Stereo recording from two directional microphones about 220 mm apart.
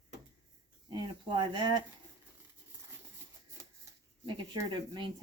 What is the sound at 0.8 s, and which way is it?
Speech, 20° right (ahead or behind).